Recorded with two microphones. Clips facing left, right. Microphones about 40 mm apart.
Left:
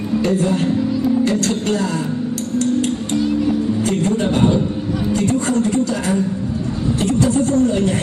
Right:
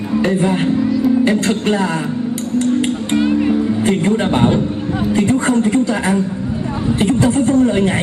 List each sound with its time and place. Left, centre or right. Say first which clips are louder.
0.2 s speech: right 2 dB; right
2.6 s music: right 1 dB; right
5.1 s a woman's voice: right 4 dB; right